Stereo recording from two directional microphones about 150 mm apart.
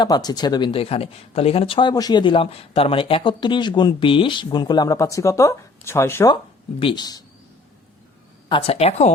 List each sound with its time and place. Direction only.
0.0 s speech: 25° left (ahead or behind)
6.3 s speech: 35° left (ahead or behind)
8.4 s speech: 40° left (ahead or behind)